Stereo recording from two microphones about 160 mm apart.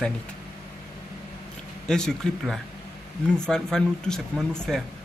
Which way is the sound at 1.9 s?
5° left (ahead or behind).